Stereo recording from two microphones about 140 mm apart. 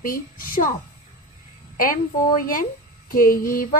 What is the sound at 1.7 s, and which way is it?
Speech, 80° left.